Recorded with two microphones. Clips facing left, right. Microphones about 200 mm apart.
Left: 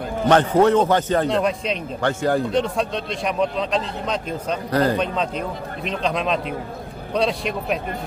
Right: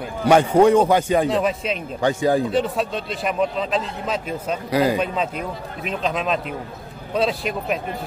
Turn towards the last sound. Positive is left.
turn(degrees=0)  # may be behind; listen again after turning